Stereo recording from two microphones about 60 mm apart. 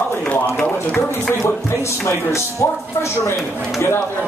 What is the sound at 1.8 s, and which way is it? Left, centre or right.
Speech, left.